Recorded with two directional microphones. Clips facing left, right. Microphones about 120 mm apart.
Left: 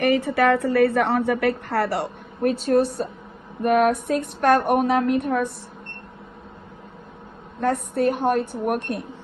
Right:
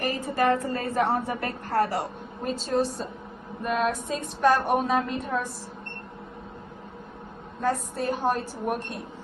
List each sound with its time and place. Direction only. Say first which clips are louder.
0.0 s a woman's voice: left 6 dB; 80° left; by 5.5 s 60° left (ahead or behind)
7.6 s a woman's voice: left 6 dB; 60° left (ahead or behind)